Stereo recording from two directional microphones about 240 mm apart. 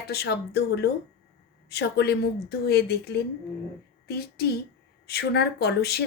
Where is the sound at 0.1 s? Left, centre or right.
Left.